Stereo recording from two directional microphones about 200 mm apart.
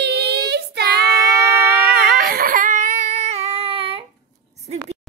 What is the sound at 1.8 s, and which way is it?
Baby cry, 50° right (ahead or behind).